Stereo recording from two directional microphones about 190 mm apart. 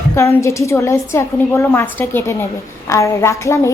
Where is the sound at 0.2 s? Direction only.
15° left (ahead or behind).